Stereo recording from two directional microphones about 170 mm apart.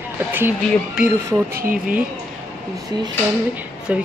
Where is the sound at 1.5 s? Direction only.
55° right (ahead or behind).